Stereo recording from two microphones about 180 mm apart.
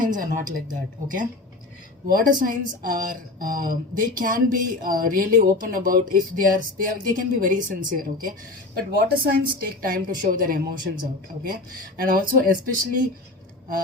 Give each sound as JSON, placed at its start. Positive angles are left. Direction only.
{"t": 0.0, "sound": "a woman's voice", "side_deg": -50}